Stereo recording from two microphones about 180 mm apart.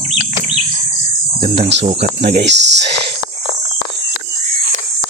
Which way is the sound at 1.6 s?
75° right (ahead or behind).